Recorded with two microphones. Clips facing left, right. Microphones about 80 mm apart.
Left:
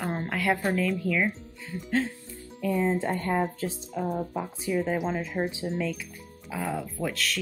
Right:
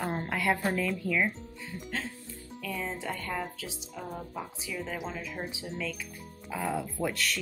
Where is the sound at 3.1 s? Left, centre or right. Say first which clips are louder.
Left 8 dB; left.